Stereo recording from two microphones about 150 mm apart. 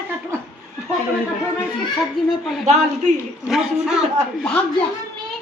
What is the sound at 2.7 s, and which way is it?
Speech, 45° right (ahead or behind).